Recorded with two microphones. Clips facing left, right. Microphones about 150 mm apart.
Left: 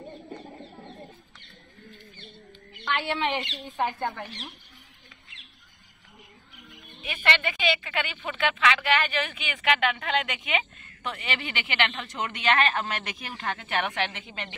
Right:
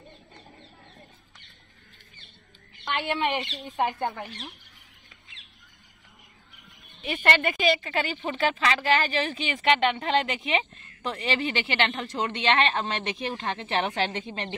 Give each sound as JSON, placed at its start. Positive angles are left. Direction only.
{"t": 2.8, "sound": "a woman's voice", "side_deg": -10}
{"t": 7.1, "sound": "a woman's voice", "side_deg": -45}